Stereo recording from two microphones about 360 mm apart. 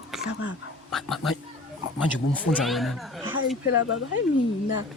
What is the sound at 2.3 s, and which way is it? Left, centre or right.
Speech, centre.